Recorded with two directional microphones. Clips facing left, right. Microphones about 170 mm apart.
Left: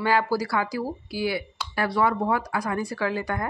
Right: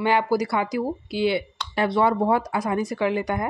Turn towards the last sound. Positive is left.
turn(degrees=-20)  # may be behind; listen again after turning